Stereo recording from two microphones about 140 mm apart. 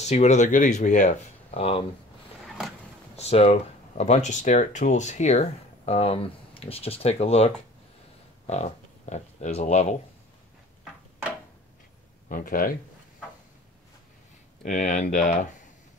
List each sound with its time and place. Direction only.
0.0 s speech: 55° left (ahead or behind)
1.5 s speech: 45° left (ahead or behind)
2.4 s a sound: centre (ahead or behind)
3.2 s speech: 50° left (ahead or behind)
12.3 s speech: 85° left
14.6 s speech: 60° left (ahead or behind)